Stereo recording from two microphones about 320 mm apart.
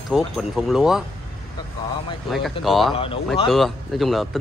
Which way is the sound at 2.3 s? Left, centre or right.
Centre.